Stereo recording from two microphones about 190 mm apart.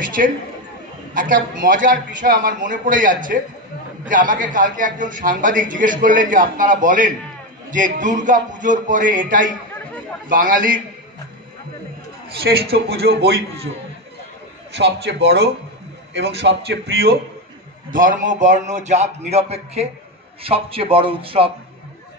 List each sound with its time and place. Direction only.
0.2 s a man's voice: 50° right (ahead or behind)
12.7 s a man's voice: 55° right (ahead or behind)
14.8 s a man's voice: 65° right (ahead or behind)
17.9 s a man's voice: 45° right (ahead or behind); by 21.5 s 30° right (ahead or behind)